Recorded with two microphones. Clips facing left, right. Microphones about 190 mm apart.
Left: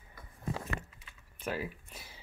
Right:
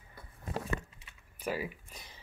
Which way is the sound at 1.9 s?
5° left (ahead or behind).